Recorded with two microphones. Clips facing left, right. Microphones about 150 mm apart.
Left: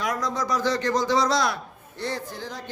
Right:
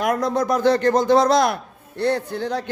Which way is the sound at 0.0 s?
55° right (ahead or behind).